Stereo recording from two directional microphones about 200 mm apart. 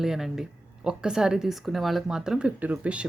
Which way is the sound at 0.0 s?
Centre (ahead or behind).